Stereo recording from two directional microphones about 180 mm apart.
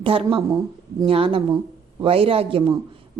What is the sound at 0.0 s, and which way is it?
Speech, 30° right (ahead or behind).